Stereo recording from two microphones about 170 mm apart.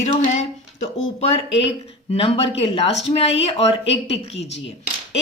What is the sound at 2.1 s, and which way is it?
A woman's voice, 35° left (ahead or behind).